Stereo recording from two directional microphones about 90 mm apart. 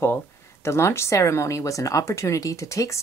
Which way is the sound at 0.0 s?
30° left (ahead or behind).